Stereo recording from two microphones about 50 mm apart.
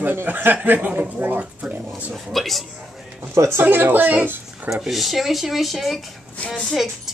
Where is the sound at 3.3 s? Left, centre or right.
Right.